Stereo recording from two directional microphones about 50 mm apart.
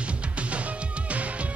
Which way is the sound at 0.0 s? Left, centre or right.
Right.